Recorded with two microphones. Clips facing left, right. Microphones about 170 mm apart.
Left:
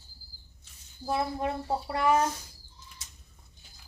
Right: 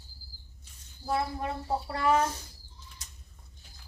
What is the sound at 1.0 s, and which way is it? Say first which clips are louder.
A child's voice: left 1 dB; 20° left (ahead or behind).